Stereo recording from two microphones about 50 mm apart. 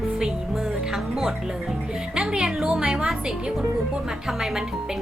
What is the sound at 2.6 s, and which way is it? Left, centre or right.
Music, centre.